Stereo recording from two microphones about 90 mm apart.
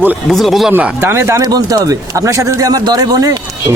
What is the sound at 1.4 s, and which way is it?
Speech, 50° right (ahead or behind).